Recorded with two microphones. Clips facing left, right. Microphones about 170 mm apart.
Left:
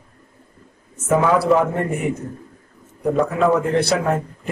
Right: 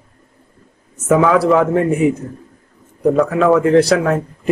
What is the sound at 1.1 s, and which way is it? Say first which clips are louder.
Speech: right 4 dB; 90° right.